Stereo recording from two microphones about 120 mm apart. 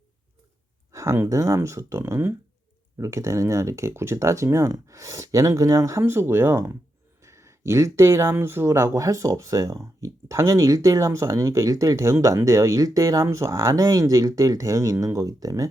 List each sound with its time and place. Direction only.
0.9 s speech: 25° right (ahead or behind)